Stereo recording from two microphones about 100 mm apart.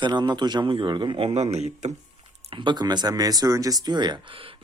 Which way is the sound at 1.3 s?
90° right.